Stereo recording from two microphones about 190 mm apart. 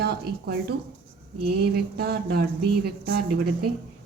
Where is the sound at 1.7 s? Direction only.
55° right (ahead or behind).